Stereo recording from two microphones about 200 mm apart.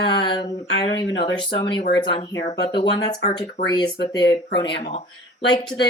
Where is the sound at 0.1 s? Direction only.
20° left (ahead or behind).